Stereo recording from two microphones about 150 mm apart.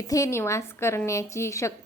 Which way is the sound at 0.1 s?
20° left (ahead or behind).